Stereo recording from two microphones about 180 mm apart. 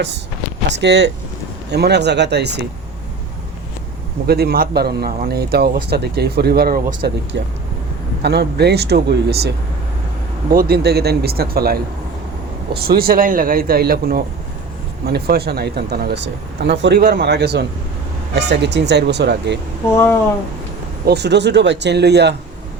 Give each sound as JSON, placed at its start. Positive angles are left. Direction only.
{"t": 0.7, "sound": "speech", "side_deg": -70}
{"t": 4.3, "sound": "speech", "side_deg": -60}
{"t": 21.0, "sound": "speech", "side_deg": -65}